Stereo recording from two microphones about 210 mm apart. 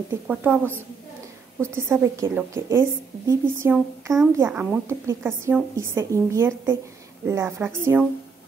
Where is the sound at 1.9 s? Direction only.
10° right (ahead or behind).